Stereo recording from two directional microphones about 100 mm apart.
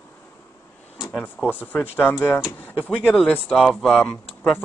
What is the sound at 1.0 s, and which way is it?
Speech, 5° right (ahead or behind).